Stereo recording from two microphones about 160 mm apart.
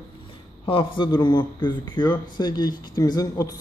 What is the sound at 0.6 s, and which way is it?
Speech, 30° left (ahead or behind).